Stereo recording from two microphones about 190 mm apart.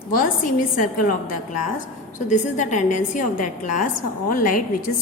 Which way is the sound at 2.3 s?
40° left (ahead or behind).